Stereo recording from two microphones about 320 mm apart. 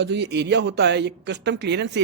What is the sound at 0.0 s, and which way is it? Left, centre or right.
Speech, right.